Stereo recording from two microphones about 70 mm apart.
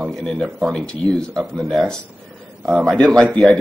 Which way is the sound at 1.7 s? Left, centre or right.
Centre.